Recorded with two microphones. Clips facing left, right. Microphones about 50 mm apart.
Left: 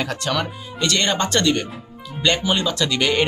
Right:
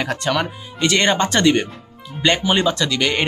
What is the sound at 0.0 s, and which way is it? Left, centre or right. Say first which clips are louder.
Speech: right 3 dB; right.